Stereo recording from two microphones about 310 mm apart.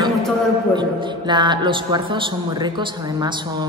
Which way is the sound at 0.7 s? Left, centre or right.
Centre.